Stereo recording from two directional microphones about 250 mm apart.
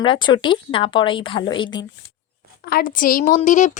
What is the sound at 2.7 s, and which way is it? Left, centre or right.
A woman's voice, left.